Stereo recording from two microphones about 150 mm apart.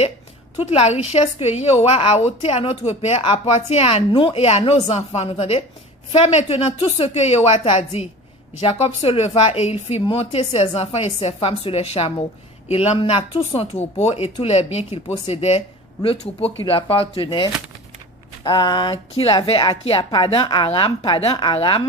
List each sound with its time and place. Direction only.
0.6 s a woman's voice: 45° left (ahead or behind)